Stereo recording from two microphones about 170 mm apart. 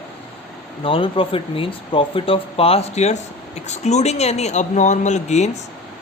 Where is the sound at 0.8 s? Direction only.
30° left (ahead or behind).